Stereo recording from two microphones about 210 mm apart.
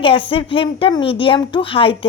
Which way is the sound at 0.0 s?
25° left (ahead or behind).